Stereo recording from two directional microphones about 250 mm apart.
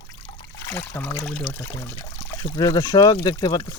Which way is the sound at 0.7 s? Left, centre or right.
Centre.